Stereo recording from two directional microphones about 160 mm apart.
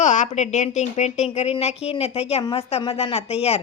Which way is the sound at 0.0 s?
50° left (ahead or behind).